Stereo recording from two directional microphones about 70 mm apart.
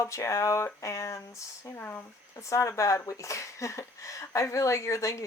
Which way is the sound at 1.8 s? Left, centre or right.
Left.